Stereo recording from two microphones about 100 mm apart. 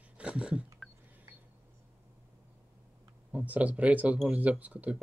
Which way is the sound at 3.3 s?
15° right (ahead or behind).